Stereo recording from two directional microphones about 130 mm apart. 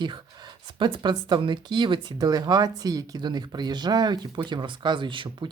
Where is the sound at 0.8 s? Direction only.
35° right (ahead or behind).